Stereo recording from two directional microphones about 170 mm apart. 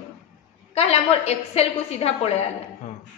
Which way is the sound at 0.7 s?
40° left (ahead or behind).